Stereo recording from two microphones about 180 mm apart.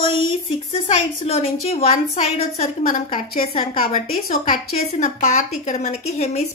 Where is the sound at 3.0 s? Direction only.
35° left (ahead or behind).